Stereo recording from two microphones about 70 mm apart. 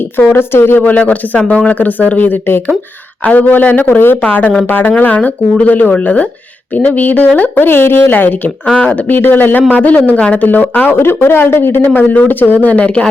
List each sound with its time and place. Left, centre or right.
0.2 s speech: left
8.6 s speech: centre
9.0 s speech: left